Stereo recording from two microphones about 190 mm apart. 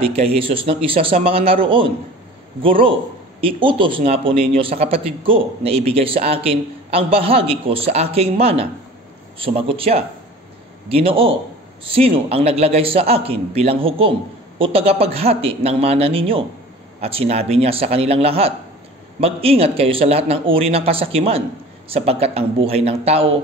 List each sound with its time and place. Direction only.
0.0 s a man's voice: 30° right (ahead or behind)